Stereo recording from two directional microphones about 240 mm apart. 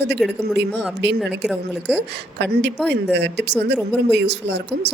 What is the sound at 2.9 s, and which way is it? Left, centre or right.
A woman's voice, right.